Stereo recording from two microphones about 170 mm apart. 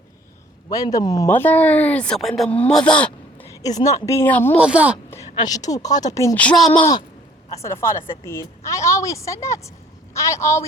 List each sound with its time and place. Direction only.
0.7 s speech: 20° left (ahead or behind)
1.3 s a woman's voice: 10° left (ahead or behind)
3.5 s a woman's voice: 20° left (ahead or behind)
4.6 s a woman's voice: 5° right (ahead or behind)
5.5 s a woman's voice: 20° left (ahead or behind)